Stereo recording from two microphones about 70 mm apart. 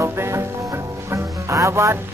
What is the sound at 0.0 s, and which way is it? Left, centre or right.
Music, right.